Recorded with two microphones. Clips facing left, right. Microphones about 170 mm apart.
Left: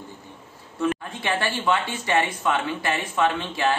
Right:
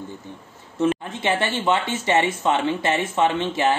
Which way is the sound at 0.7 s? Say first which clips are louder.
Right 4 dB; 25° right (ahead or behind).